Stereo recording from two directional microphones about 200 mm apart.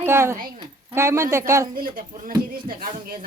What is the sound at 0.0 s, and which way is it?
Speech, 10° right (ahead or behind).